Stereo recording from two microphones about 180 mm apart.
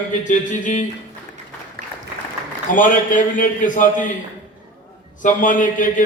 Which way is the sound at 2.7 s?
45° left (ahead or behind).